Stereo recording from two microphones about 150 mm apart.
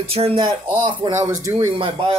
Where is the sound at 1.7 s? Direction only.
35° right (ahead or behind).